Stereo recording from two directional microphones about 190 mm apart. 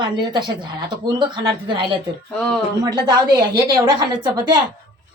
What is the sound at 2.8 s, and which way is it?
A woman's voice, 20° right (ahead or behind).